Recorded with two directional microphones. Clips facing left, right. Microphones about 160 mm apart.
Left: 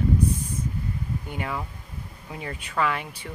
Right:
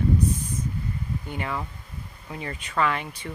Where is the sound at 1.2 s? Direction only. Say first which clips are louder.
Right 2 dB; 5° left (ahead or behind).